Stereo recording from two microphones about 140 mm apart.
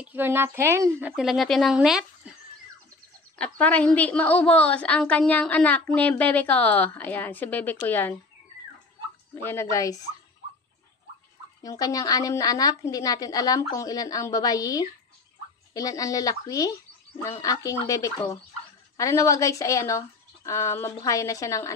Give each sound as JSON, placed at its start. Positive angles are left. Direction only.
{"t": 0.0, "sound": "speech", "side_deg": -15}
{"t": 1.1, "sound": "speech", "side_deg": 0}
{"t": 3.3, "sound": "a woman's voice", "side_deg": 10}
{"t": 9.3, "sound": "a woman's voice", "side_deg": 20}
{"t": 11.6, "sound": "a woman's voice", "side_deg": 25}